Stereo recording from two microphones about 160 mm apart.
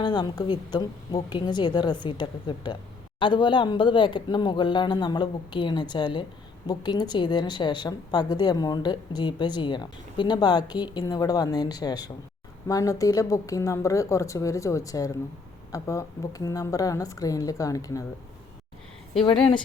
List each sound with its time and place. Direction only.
0.0 s a woman's voice: 30° left (ahead or behind)